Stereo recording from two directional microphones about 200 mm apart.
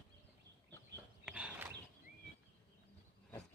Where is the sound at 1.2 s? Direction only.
5° right (ahead or behind).